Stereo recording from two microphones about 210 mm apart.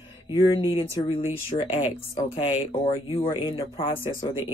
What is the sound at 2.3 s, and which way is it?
Speech, 30° left (ahead or behind).